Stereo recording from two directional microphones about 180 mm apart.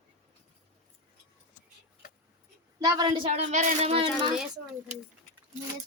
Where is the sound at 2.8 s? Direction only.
20° right (ahead or behind).